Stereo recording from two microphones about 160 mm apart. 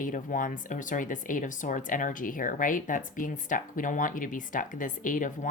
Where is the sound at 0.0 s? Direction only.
55° left (ahead or behind).